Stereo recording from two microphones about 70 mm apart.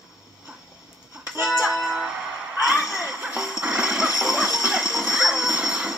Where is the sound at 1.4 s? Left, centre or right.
Centre.